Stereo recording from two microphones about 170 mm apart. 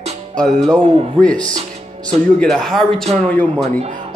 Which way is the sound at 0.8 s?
35° right (ahead or behind).